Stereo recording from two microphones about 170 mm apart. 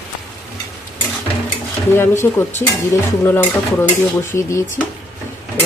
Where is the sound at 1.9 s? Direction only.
15° left (ahead or behind).